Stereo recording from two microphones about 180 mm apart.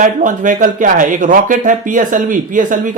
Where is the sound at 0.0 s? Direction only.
45° right (ahead or behind).